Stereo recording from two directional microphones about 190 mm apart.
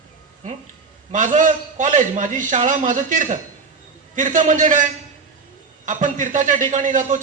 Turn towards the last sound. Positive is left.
turn(degrees=-40)  # may be behind; listen again after turning